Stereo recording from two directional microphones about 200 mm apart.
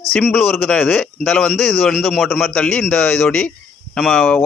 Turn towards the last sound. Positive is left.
turn(degrees=0)  # may be behind; listen again after turning